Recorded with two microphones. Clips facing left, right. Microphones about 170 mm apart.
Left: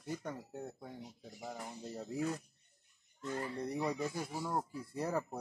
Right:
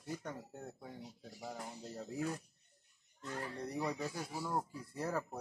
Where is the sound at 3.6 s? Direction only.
15° left (ahead or behind).